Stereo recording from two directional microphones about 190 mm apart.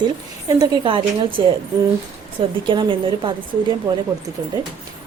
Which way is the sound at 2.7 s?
25° right (ahead or behind).